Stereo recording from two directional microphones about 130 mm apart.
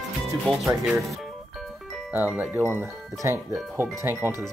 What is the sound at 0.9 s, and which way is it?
Speech, centre (ahead or behind).